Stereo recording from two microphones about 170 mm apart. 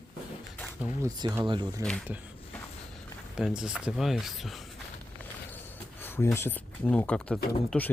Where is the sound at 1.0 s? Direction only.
20° right (ahead or behind).